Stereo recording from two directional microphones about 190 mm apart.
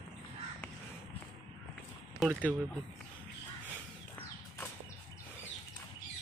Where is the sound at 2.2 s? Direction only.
Centre (ahead or behind).